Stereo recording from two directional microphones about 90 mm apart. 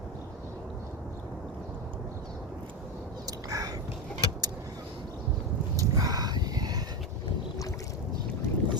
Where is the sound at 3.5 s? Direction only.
40° right (ahead or behind).